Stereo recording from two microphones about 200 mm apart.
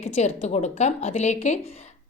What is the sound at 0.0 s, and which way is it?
A woman's voice, 35° left (ahead or behind).